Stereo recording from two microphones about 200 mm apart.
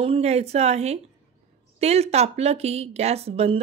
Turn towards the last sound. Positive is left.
turn(degrees=-30)  # may be behind; listen again after turning